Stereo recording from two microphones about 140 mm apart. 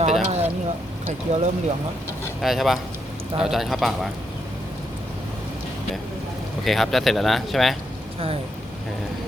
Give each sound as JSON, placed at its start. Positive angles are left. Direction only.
{"t": 0.0, "sound": "a sound", "side_deg": -50}
{"t": 1.0, "sound": "speech", "side_deg": -50}
{"t": 2.4, "sound": "speech", "side_deg": 0}
{"t": 6.7, "sound": "speech", "side_deg": 0}